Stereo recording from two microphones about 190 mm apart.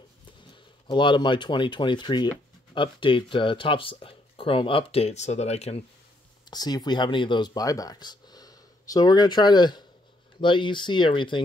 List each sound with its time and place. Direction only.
0.5 s speech: 25° left (ahead or behind)
6.5 s speech: 20° left (ahead or behind)